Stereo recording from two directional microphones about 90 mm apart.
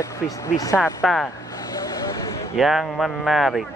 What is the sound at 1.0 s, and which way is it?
Speech, 5° left (ahead or behind).